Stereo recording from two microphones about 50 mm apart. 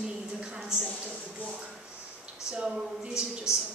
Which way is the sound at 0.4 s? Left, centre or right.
Centre.